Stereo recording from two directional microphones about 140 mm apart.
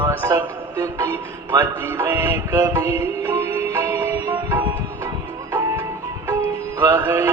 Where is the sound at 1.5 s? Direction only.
20° right (ahead or behind).